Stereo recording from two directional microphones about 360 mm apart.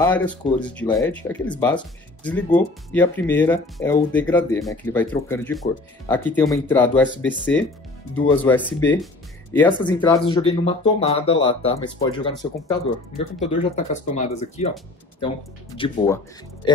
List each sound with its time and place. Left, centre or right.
0.0 s speech: centre
16.6 s speech: centre